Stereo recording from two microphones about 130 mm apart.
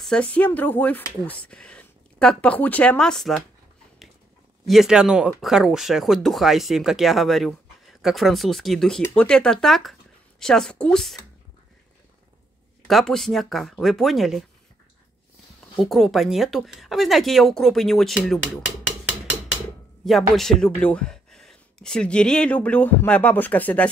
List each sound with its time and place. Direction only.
0.0 s speech: 10° left (ahead or behind)
4.6 s speech: centre (ahead or behind)
12.8 s speech: 5° left (ahead or behind)
15.8 s speech: centre (ahead or behind)
20.1 s speech: centre (ahead or behind)